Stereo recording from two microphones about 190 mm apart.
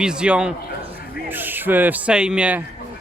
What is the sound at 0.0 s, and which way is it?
A man's voice, 5° right (ahead or behind).